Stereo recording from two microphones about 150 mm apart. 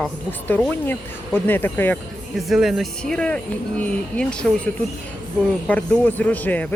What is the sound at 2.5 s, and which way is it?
Speech, centre (ahead or behind).